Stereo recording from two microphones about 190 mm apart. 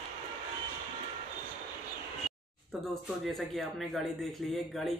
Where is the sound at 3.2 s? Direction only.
Centre (ahead or behind).